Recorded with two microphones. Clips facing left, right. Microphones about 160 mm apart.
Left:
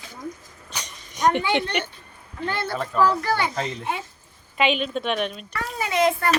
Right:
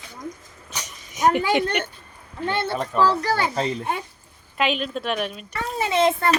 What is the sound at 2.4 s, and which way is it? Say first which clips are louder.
A child's voice: right 2 dB; 25° right (ahead or behind).